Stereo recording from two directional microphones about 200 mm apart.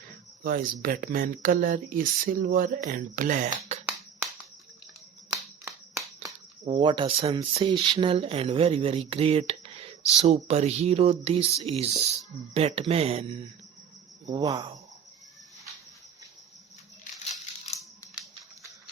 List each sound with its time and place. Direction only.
0.4 s speech: 45° right (ahead or behind)
3.8 s finger snapping: 10° right (ahead or behind)
6.7 s speech: 25° right (ahead or behind)
14.3 s speech: 20° right (ahead or behind)